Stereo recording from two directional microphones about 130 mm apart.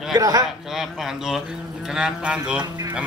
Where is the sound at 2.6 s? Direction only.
30° right (ahead or behind).